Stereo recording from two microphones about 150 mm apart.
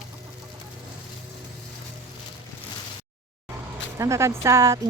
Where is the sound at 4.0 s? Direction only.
20° right (ahead or behind).